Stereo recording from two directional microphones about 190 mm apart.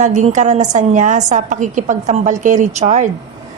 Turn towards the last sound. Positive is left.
turn(degrees=-40)  # may be behind; listen again after turning